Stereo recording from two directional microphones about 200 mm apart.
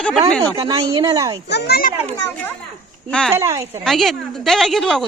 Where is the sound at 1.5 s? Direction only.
55° left (ahead or behind).